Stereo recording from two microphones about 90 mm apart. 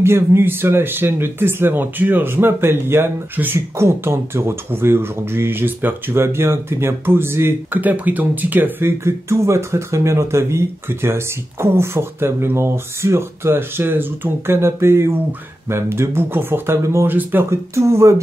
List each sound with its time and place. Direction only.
0.0 s speech: 30° right (ahead or behind)